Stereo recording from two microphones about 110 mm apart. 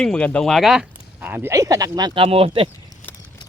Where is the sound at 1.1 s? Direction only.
15° right (ahead or behind).